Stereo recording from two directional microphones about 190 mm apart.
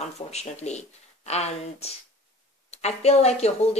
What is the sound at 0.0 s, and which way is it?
Speech, 35° left (ahead or behind).